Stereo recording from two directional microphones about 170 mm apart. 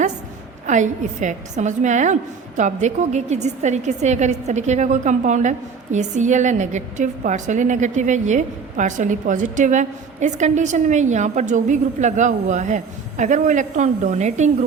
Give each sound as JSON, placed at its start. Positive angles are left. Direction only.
{"t": 0.7, "sound": "a woman's voice", "side_deg": -45}